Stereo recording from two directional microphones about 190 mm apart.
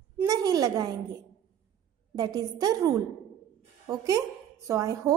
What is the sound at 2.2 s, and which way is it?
A woman's voice, 20° right (ahead or behind).